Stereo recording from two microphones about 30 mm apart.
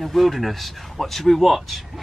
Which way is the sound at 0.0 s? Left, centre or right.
Centre.